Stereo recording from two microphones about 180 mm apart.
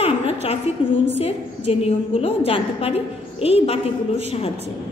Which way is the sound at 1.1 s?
35° left (ahead or behind).